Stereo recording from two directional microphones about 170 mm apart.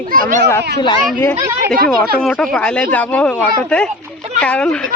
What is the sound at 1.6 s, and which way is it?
Speech, 55° right (ahead or behind).